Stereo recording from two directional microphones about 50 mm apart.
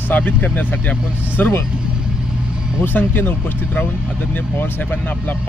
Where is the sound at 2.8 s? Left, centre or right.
Left.